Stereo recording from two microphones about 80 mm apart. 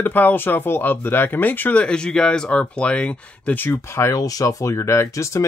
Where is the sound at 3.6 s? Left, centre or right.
Left.